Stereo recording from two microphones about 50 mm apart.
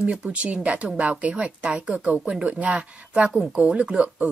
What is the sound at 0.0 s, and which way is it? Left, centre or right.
Speech, right.